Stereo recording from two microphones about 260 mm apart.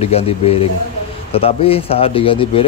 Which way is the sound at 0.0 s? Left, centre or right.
Left.